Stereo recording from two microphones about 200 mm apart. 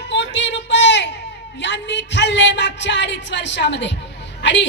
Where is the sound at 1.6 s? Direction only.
60° left (ahead or behind).